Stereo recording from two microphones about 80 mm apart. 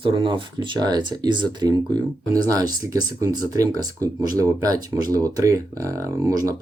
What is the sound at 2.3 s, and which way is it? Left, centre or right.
Speech, right.